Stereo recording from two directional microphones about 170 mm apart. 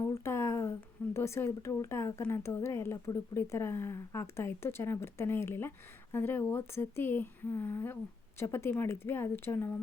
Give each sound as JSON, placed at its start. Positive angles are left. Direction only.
{"t": 0.1, "sound": "speech", "side_deg": 15}